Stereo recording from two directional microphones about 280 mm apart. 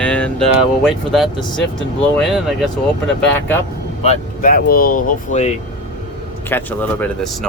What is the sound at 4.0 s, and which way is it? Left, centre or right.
Speech, left.